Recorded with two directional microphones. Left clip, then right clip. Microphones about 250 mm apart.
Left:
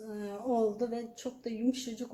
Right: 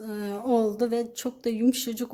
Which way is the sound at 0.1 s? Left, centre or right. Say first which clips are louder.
Right 7 dB; right.